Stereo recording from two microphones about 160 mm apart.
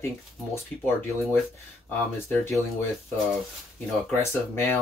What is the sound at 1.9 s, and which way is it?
Speech, 15° left (ahead or behind).